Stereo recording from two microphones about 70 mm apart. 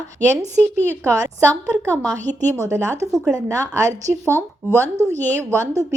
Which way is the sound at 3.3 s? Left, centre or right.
Right.